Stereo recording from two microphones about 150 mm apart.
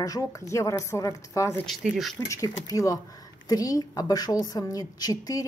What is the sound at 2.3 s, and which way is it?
A woman's voice, 25° left (ahead or behind).